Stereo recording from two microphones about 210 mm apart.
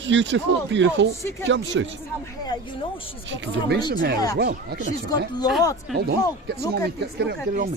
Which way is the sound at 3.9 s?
45° right (ahead or behind).